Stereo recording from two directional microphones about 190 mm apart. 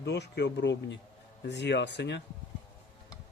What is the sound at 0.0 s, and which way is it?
Speech, 60° left (ahead or behind).